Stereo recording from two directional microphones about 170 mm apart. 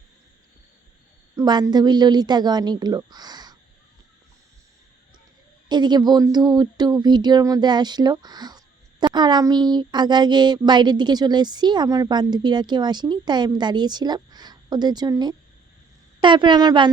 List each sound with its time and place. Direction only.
1.4 s speech: 20° right (ahead or behind)
5.6 s speech: 25° right (ahead or behind)